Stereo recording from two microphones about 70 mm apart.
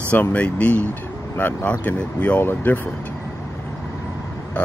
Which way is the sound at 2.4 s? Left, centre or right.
Left.